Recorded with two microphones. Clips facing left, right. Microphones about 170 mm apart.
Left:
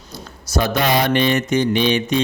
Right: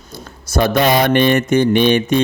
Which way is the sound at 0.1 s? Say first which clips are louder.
Right 2 dB; 55° right (ahead or behind).